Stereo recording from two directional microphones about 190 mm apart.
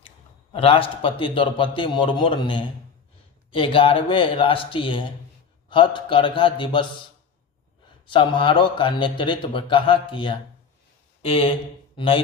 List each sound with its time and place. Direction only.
0.5 s a man's voice: 30° left (ahead or behind)
8.0 s a man's voice: 25° left (ahead or behind)